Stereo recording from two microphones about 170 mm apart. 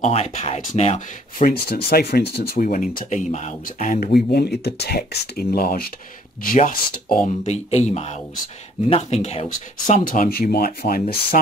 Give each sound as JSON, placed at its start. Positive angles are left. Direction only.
{"t": 0.0, "sound": "speech", "side_deg": 40}
{"t": 1.5, "sound": "speech", "side_deg": 65}
{"t": 4.1, "sound": "speech", "side_deg": 70}
{"t": 7.4, "sound": "speech", "side_deg": 40}
{"t": 10.0, "sound": "speech", "side_deg": 55}